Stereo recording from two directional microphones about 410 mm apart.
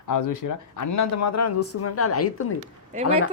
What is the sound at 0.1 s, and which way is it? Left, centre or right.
Speech, left.